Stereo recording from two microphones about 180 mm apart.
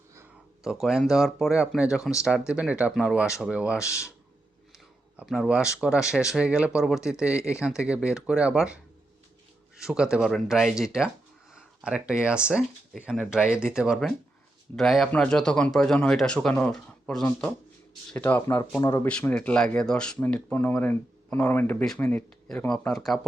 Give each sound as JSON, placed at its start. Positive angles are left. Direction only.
{"t": 0.6, "sound": "speech", "side_deg": 0}
{"t": 5.1, "sound": "speech", "side_deg": 0}